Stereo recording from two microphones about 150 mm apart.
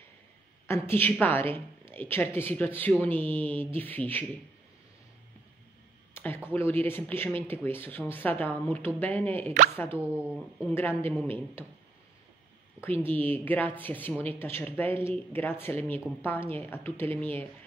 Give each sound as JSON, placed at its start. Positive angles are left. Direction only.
{"t": 0.7, "sound": "speech", "side_deg": 15}
{"t": 6.1, "sound": "a sound", "side_deg": 15}
{"t": 6.5, "sound": "speech", "side_deg": 15}
{"t": 9.9, "sound": "speech", "side_deg": -10}
{"t": 10.7, "sound": "speech", "side_deg": 15}
{"t": 13.0, "sound": "speech", "side_deg": 15}